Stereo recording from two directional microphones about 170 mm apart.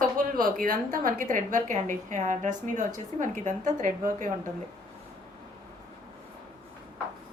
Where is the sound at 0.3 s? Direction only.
55° right (ahead or behind).